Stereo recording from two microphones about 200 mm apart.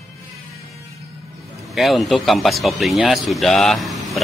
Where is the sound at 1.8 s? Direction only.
Centre (ahead or behind).